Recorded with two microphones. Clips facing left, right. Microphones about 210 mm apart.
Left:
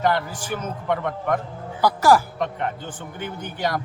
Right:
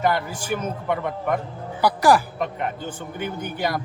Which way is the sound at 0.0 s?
10° right (ahead or behind).